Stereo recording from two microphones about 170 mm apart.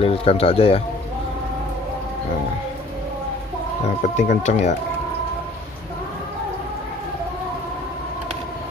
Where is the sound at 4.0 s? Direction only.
45° left (ahead or behind).